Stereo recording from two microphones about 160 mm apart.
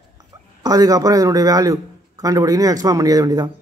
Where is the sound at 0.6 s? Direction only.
25° right (ahead or behind).